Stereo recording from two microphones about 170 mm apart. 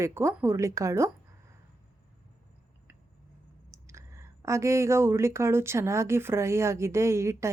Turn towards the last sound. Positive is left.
turn(degrees=-15)  # may be behind; listen again after turning